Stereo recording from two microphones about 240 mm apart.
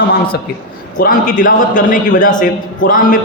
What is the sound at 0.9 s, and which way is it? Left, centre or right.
A man's voice, left.